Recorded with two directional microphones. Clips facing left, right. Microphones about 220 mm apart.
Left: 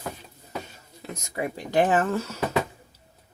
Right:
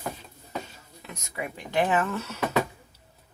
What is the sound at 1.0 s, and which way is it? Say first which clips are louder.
Speech: left 5 dB; 40° left (ahead or behind).